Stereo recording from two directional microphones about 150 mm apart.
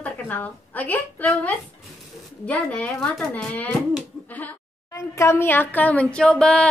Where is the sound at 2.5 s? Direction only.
10° left (ahead or behind).